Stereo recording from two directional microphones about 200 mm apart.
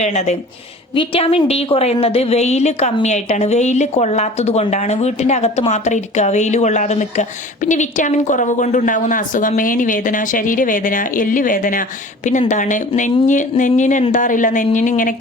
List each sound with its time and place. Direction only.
0.0 s a woman's voice: 35° left (ahead or behind)